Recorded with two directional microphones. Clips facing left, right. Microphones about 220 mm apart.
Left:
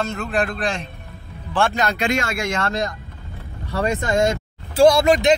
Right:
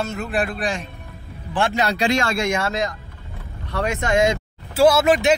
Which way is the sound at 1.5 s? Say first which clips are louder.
Left 1 dB; 20° right (ahead or behind).